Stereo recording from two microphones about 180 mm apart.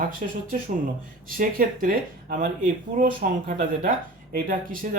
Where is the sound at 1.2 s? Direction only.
50° right (ahead or behind).